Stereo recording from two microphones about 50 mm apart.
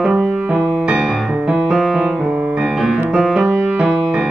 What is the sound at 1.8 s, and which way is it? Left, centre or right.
Music, centre.